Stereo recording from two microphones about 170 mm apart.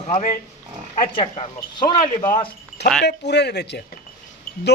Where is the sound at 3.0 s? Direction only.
80° left.